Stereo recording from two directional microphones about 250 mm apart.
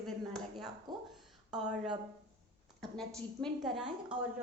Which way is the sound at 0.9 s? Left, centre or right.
Centre.